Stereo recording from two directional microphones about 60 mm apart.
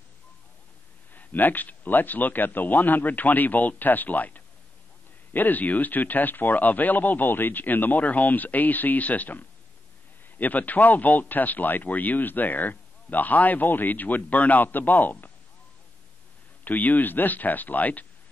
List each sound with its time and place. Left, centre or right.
1.1 s speech: left
16.6 s speech: left